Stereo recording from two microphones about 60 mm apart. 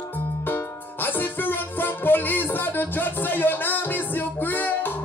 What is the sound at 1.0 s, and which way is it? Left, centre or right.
Music, left.